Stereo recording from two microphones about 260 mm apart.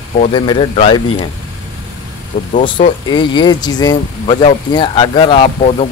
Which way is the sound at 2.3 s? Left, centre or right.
Left.